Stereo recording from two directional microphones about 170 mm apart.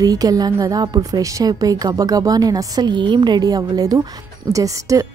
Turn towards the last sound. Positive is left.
turn(degrees=-20)  # may be behind; listen again after turning